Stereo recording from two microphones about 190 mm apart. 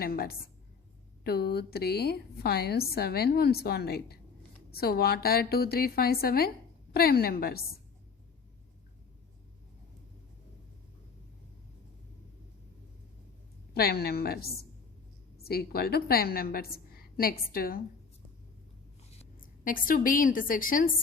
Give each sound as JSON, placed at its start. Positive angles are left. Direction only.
{"t": 0.0, "sound": "a woman's voice", "side_deg": 55}
{"t": 13.7, "sound": "a woman's voice", "side_deg": 55}
{"t": 19.4, "sound": "a woman's voice", "side_deg": 45}